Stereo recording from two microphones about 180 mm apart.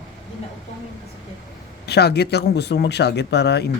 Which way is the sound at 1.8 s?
65° left (ahead or behind).